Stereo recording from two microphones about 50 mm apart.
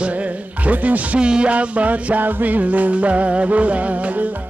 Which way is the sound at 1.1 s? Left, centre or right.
Centre.